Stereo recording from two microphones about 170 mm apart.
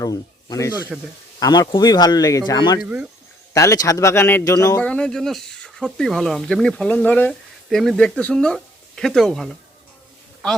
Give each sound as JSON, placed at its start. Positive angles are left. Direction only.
{"t": 0.0, "sound": "speech", "side_deg": 20}
{"t": 0.7, "sound": "speech", "side_deg": -10}
{"t": 1.4, "sound": "speech", "side_deg": 25}
{"t": 2.8, "sound": "speech", "side_deg": -10}
{"t": 3.5, "sound": "speech", "side_deg": 20}
{"t": 4.8, "sound": "speech", "side_deg": 5}